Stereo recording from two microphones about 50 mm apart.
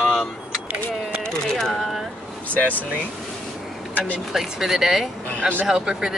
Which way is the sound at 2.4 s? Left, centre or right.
Left.